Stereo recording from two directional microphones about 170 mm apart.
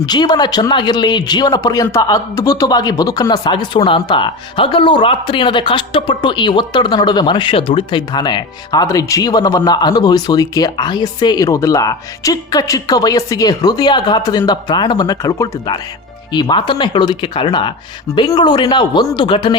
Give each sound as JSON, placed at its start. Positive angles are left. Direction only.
{"t": 0.0, "sound": "speech", "side_deg": 25}